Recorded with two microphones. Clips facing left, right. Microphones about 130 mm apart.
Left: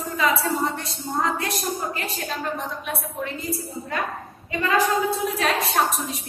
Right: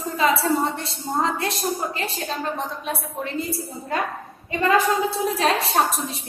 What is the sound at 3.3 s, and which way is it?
A woman's voice, 30° right (ahead or behind).